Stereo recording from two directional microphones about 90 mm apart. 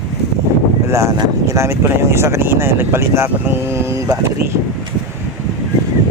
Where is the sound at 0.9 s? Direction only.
35° right (ahead or behind).